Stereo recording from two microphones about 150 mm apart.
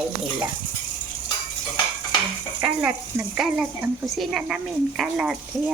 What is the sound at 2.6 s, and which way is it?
Speech, 10° right (ahead or behind).